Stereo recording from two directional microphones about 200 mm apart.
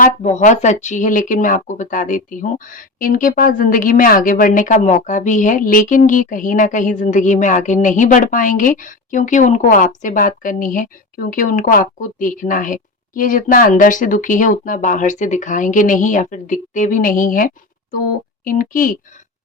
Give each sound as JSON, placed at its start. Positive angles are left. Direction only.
{"t": 0.0, "sound": "a woman's voice", "side_deg": 35}